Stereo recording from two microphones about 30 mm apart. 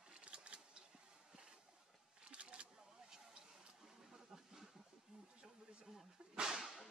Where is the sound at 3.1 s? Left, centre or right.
Centre.